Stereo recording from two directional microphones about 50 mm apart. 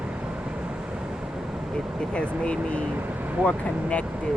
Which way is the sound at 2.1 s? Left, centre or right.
Left.